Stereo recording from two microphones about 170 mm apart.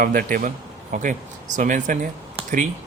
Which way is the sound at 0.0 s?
55° right (ahead or behind).